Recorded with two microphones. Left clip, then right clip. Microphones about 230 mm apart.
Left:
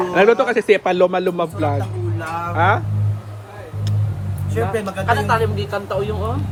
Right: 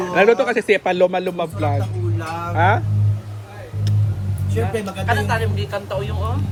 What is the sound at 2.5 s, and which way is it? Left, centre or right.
Speech, centre.